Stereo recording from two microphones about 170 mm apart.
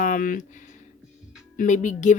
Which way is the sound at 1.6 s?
45° left (ahead or behind).